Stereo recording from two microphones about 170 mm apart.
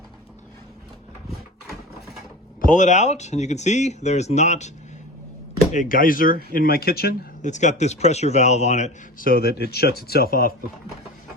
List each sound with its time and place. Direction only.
2.6 s a man's voice: 50° left (ahead or behind)
5.7 s speech: 50° left (ahead or behind)
7.4 s a man's voice: 45° left (ahead or behind); by 10.5 s 60° left (ahead or behind)